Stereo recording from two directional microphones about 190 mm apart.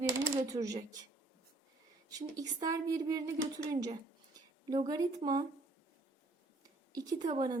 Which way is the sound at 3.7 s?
20° right (ahead or behind).